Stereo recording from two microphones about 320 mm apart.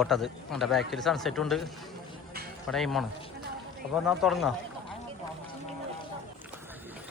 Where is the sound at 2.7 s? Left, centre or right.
Centre.